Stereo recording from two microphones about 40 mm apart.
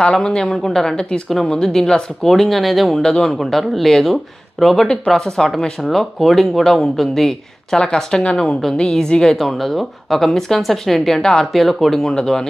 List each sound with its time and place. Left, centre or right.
0.2 s speech: centre
3.0 s speech: centre
7.7 s speech: centre
9.4 s speech: centre